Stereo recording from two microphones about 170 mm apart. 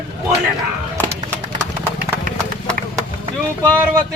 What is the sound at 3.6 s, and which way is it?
Speech, 10° left (ahead or behind).